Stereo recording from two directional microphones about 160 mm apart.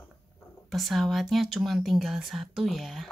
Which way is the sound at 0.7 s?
Centre (ahead or behind).